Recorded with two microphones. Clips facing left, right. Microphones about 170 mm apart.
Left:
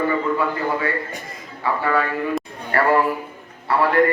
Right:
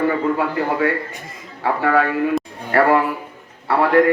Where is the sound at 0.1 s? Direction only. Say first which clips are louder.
Right 2 dB; 60° right (ahead or behind).